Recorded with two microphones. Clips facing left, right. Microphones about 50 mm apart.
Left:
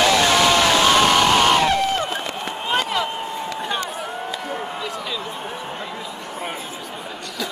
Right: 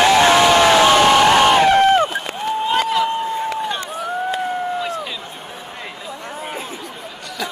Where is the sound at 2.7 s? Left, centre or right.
Centre.